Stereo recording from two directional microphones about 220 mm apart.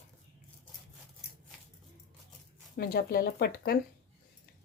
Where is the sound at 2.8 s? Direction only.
45° left (ahead or behind).